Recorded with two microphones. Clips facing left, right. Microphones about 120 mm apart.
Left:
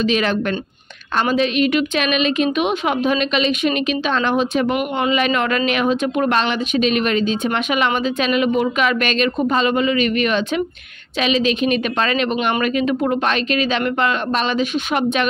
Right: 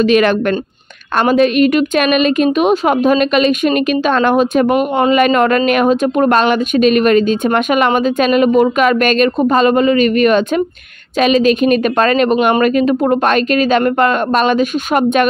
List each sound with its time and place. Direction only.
0.0 s a woman's voice: 60° right (ahead or behind)